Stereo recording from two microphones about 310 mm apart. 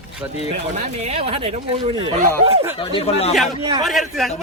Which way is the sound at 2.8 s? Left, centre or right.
Centre.